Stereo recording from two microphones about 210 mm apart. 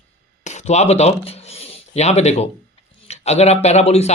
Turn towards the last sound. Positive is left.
turn(degrees=30)  # may be behind; listen again after turning